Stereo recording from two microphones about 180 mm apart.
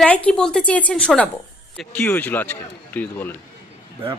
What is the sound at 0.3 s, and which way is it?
A woman's voice, 5° left (ahead or behind).